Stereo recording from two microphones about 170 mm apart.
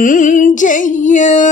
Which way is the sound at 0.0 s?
50° left (ahead or behind).